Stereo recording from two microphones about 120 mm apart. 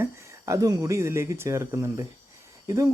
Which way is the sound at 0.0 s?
25° right (ahead or behind).